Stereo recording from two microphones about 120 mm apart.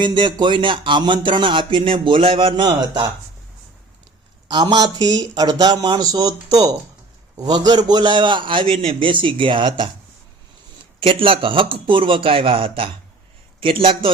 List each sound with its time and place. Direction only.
0.0 s speech: 40° right (ahead or behind)
4.4 s speech: 40° right (ahead or behind)
11.0 s speech: 45° right (ahead or behind)